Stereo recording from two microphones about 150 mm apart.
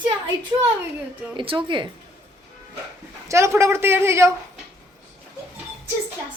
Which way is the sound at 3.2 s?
20° right (ahead or behind).